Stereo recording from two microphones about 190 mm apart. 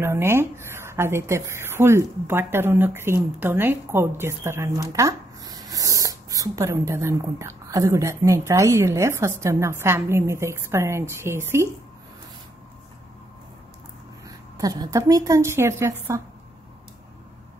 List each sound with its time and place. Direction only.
0.0 s speech: 15° right (ahead or behind)
14.2 s a woman's voice: 20° right (ahead or behind)